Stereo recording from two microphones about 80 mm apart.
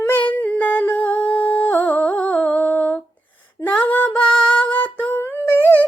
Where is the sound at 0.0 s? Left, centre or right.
Left.